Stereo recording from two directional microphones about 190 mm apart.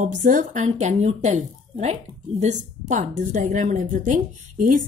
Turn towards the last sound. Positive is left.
turn(degrees=-45)  # may be behind; listen again after turning